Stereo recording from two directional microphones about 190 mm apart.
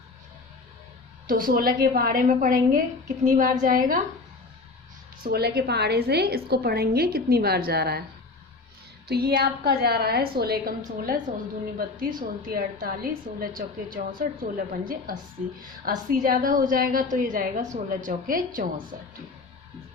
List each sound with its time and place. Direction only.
1.3 s a woman's voice: 50° right (ahead or behind)
5.2 s a woman's voice: 55° right (ahead or behind)
9.0 s a woman's voice: 55° right (ahead or behind)